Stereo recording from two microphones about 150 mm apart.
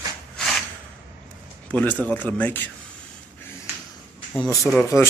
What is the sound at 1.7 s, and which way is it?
A man's voice, 10° left (ahead or behind).